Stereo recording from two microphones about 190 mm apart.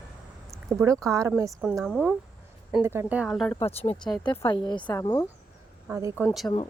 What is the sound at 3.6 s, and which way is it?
Speech, 30° left (ahead or behind).